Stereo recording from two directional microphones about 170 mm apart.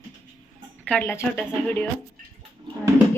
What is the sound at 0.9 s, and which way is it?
Speech, 5° left (ahead or behind).